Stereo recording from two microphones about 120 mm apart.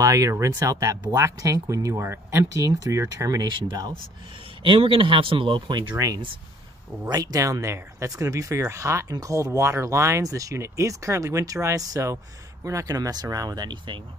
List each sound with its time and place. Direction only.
0.0 s speech: 25° right (ahead or behind)
4.6 s speech: 45° right (ahead or behind)